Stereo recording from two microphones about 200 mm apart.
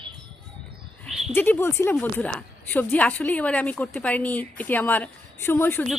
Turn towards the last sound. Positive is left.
turn(degrees=10)  # may be behind; listen again after turning